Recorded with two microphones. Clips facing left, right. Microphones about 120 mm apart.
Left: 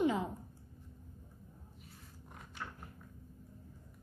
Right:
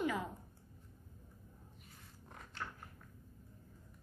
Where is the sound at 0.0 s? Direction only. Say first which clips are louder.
Left 5 dB; 20° left (ahead or behind).